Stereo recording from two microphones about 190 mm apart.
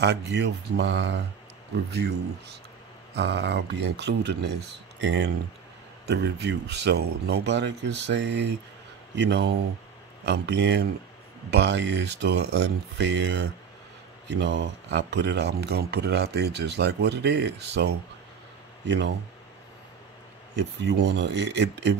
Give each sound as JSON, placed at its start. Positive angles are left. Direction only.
{"t": 0.0, "sound": "speech", "side_deg": -60}
{"t": 20.5, "sound": "speech", "side_deg": -65}